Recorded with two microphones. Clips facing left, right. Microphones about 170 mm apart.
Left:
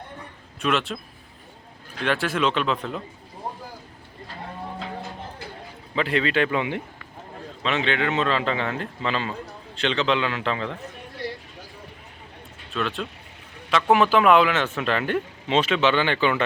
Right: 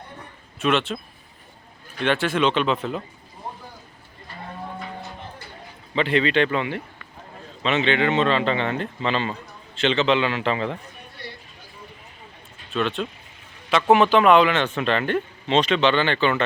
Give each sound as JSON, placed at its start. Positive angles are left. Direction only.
{"t": 0.6, "sound": "speech", "side_deg": 0}
{"t": 2.0, "sound": "speech", "side_deg": 0}
{"t": 5.9, "sound": "speech", "side_deg": 0}
{"t": 7.6, "sound": "speech", "side_deg": 0}
{"t": 11.2, "sound": "a sound", "side_deg": 90}
{"t": 12.7, "sound": "speech", "side_deg": 0}